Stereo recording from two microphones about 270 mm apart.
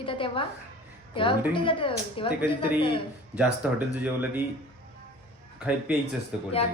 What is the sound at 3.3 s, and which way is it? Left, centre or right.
Speech, centre.